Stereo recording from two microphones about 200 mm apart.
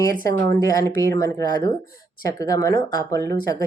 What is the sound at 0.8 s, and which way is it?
Speech, 15° left (ahead or behind).